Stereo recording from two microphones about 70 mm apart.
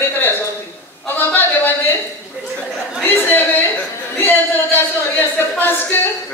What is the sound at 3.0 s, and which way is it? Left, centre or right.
Speech, left.